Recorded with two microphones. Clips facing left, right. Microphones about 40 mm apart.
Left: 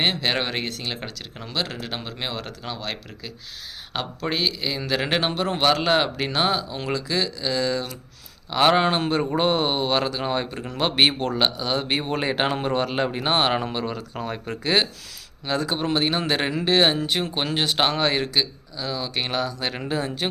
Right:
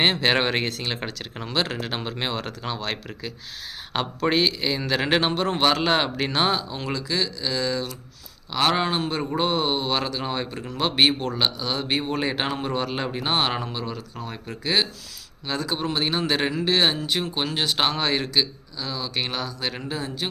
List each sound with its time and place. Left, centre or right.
0.0 s a man's voice: centre
9.0 s speech: left